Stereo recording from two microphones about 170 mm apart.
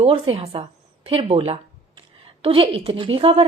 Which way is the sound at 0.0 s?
35° right (ahead or behind).